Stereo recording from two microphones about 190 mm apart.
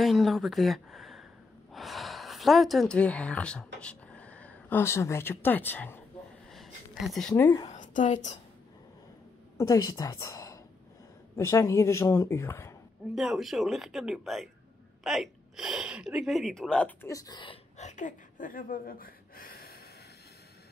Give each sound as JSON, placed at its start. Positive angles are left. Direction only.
{"t": 0.0, "sound": "speech", "side_deg": 0}
{"t": 6.5, "sound": "a sound", "side_deg": 0}
{"t": 7.6, "sound": "a woman's voice", "side_deg": 40}
{"t": 9.6, "sound": "a woman's voice", "side_deg": 15}
{"t": 13.1, "sound": "speech", "side_deg": 0}
{"t": 17.7, "sound": "gasp", "side_deg": 40}